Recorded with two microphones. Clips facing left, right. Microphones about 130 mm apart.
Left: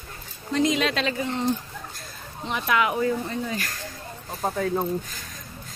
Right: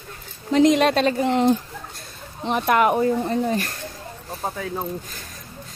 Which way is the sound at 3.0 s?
35° right (ahead or behind).